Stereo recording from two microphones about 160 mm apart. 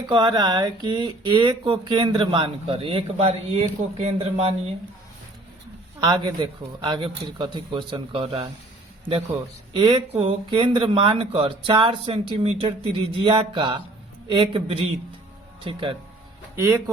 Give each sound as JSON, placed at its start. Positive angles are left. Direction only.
{"t": 0.1, "sound": "speech", "side_deg": -25}
{"t": 6.0, "sound": "a man's voice", "side_deg": -25}
{"t": 9.7, "sound": "speech", "side_deg": -30}
{"t": 16.6, "sound": "a man's voice", "side_deg": -20}